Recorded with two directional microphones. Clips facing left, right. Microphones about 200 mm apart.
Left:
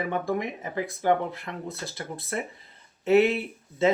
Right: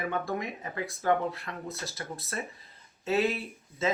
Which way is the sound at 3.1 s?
25° left (ahead or behind).